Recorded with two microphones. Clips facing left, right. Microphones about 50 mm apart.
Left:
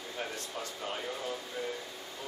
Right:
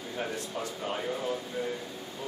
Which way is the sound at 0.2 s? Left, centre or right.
Centre.